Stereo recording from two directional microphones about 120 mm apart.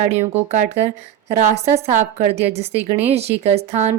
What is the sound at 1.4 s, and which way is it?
Speech, 90° right.